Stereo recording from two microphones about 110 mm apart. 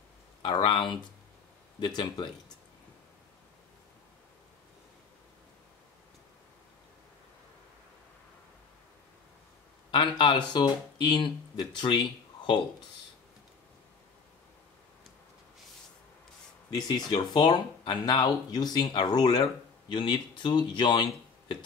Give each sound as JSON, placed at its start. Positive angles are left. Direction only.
{"t": 0.4, "sound": "speech", "side_deg": 50}
{"t": 9.8, "sound": "speech", "side_deg": 50}
{"t": 16.7, "sound": "speech", "side_deg": 40}